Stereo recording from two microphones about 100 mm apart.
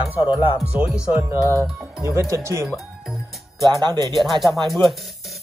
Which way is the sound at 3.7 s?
45° right (ahead or behind).